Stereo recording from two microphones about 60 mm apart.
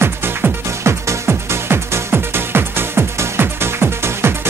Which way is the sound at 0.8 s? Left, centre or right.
Right.